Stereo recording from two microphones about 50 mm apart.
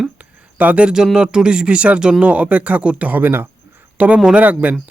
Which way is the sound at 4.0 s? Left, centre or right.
Right.